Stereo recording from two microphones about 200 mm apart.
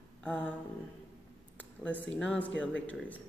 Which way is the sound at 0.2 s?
5° left (ahead or behind).